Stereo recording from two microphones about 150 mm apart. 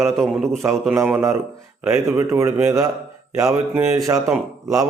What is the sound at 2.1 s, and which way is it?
A man's voice, 20° right (ahead or behind).